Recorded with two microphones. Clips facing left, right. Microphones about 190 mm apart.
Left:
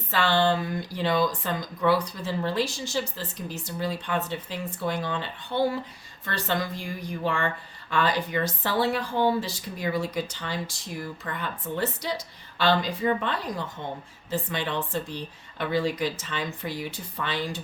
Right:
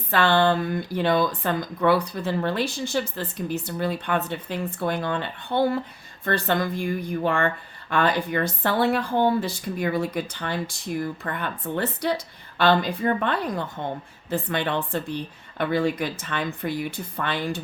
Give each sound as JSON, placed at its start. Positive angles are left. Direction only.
{"t": 0.1, "sound": "a woman's voice", "side_deg": -55}